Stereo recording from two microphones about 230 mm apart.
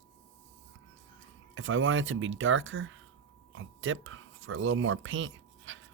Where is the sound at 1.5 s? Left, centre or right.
Right.